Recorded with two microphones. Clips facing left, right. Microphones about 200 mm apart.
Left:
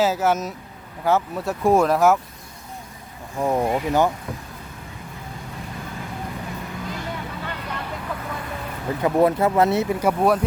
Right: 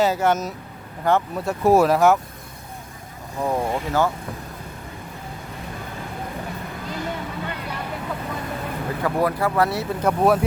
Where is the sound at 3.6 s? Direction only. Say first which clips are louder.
Left 3 dB; 20° left (ahead or behind).